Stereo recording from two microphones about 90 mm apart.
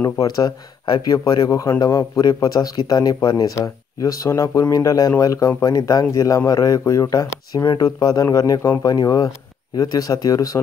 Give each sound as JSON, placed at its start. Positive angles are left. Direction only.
{"t": 0.0, "sound": "speech", "side_deg": 40}